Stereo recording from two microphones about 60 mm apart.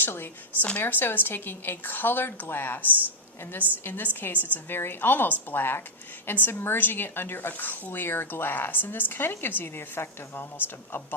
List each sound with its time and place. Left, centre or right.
0.0 s a woman's voice: left